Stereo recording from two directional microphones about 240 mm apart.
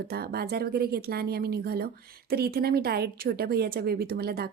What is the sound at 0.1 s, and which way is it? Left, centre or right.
Speech, right.